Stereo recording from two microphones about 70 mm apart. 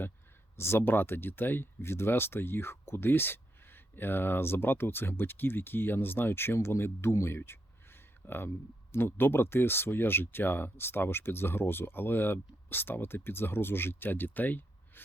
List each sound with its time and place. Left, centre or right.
0.5 s speech: left